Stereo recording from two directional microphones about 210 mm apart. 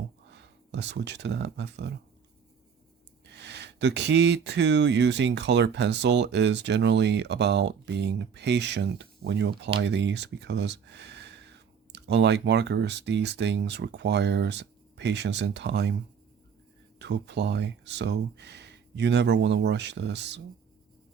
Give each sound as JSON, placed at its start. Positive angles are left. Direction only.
{"t": 0.3, "sound": "speech", "side_deg": -55}
{"t": 3.2, "sound": "speech", "side_deg": -55}
{"t": 17.0, "sound": "speech", "side_deg": -55}